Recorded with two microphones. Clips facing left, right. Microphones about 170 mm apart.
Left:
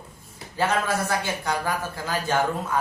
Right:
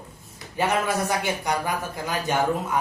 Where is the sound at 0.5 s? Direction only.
15° right (ahead or behind).